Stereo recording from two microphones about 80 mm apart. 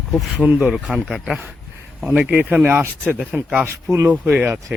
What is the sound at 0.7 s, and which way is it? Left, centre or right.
Speech, centre.